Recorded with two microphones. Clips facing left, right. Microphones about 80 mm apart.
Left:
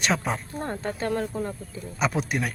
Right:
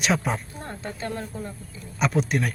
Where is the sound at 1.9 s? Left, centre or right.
Centre.